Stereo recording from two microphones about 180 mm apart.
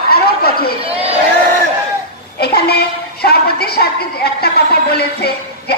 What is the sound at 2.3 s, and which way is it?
A woman's voice, 60° left (ahead or behind).